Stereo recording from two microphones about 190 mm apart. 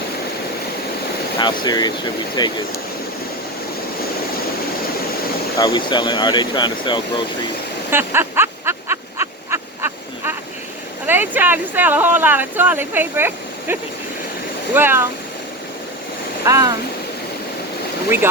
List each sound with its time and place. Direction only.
1.4 s speech: 20° left (ahead or behind)
5.5 s speech: 20° left (ahead or behind)
7.9 s a sound: 10° right (ahead or behind)
11.0 s speech: 10° right (ahead or behind)
16.5 s speech: 15° right (ahead or behind)